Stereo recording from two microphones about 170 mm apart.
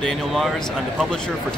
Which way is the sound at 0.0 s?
Centre (ahead or behind).